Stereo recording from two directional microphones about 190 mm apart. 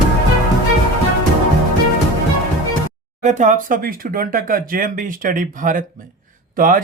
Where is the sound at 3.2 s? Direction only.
40° right (ahead or behind).